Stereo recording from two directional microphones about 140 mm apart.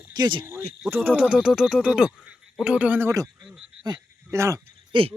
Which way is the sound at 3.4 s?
5° right (ahead or behind).